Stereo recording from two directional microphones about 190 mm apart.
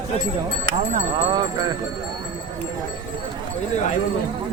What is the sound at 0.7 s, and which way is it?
Speech, 40° right (ahead or behind).